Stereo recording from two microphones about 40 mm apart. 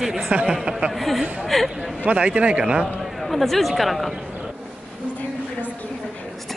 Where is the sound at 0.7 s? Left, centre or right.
Right.